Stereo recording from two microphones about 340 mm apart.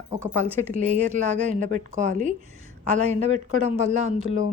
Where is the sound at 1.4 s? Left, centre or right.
Right.